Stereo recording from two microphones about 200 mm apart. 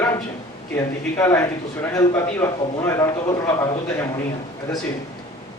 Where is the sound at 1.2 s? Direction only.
10° left (ahead or behind).